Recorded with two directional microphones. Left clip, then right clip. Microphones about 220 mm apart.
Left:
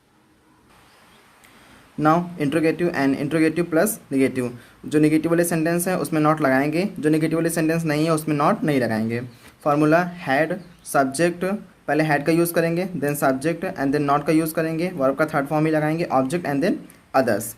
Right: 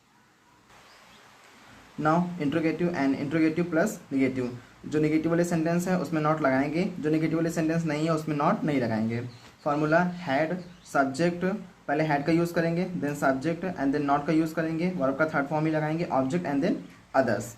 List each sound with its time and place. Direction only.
2.0 s speech: 50° left (ahead or behind)